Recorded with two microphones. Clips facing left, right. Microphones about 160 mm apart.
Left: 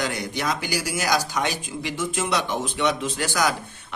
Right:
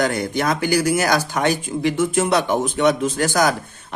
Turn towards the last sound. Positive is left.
turn(degrees=-45)  # may be behind; listen again after turning